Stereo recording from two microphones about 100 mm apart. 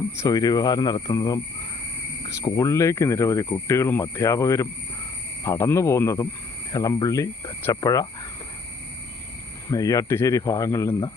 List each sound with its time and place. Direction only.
0.2 s speech: 40° left (ahead or behind)
2.4 s speech: 30° left (ahead or behind)
9.6 s speech: 35° left (ahead or behind)